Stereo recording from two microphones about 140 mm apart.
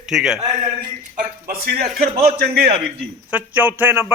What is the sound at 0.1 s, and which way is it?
Speech, 5° right (ahead or behind).